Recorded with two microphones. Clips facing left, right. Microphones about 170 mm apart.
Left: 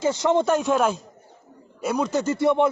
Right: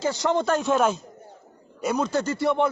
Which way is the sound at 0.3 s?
20° left (ahead or behind).